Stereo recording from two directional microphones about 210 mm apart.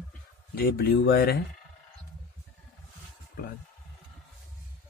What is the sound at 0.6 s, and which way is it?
Speech, 45° left (ahead or behind).